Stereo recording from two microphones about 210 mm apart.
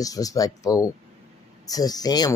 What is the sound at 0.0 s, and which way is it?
Speech, 15° left (ahead or behind).